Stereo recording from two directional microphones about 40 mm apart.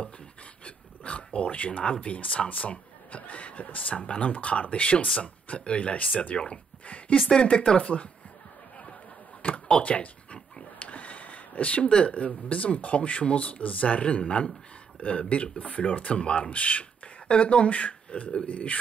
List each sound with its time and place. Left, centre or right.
0.7 s speech: left
6.3 s speech: left
9.4 s a sound: left
12.1 s speech: left